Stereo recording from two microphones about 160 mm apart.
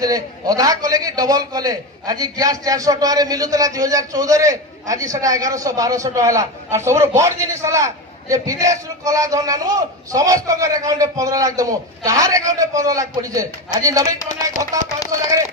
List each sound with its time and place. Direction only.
0.0 s a man's voice: 25° right (ahead or behind)